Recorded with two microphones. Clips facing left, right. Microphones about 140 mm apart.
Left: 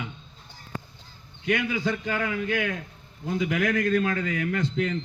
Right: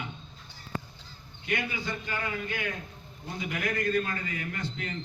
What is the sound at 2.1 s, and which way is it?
A man's voice, 90° left.